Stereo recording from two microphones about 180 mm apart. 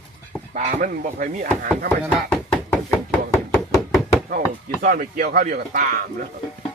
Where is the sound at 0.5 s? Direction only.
45° right (ahead or behind).